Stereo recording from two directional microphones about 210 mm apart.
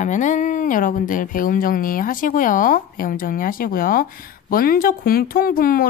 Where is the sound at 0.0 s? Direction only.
35° left (ahead or behind).